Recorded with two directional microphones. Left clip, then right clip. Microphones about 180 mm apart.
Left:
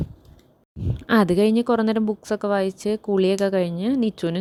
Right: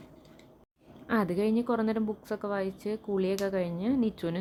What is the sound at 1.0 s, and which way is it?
A woman's voice, 50° left (ahead or behind).